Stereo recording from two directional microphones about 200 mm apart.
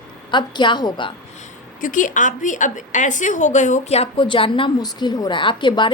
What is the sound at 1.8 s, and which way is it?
A woman's voice, 40° left (ahead or behind).